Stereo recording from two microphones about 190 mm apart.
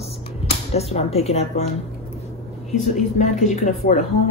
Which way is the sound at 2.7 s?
40° left (ahead or behind).